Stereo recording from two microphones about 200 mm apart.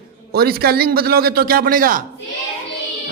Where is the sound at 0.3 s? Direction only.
50° right (ahead or behind).